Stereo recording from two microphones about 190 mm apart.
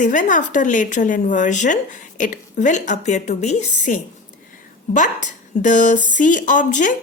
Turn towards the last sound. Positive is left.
turn(degrees=40)  # may be behind; listen again after turning